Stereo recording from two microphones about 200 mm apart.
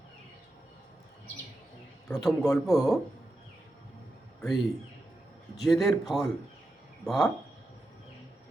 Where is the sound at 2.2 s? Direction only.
15° left (ahead or behind).